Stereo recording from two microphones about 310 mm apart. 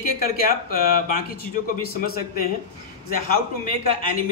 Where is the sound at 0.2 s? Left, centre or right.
Left.